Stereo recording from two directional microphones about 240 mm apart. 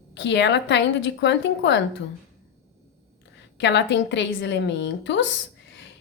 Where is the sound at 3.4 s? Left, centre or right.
Left.